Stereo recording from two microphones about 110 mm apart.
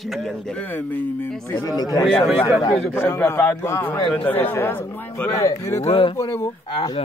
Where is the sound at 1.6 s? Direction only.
35° left (ahead or behind).